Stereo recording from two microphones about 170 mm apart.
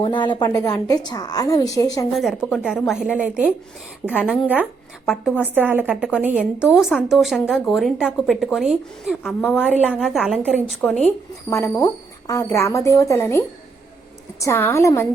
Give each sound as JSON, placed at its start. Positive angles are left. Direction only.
{"t": 0.0, "sound": "a woman's voice", "side_deg": 30}
{"t": 2.1, "sound": "a woman's voice", "side_deg": 0}
{"t": 9.2, "sound": "a woman's voice", "side_deg": 10}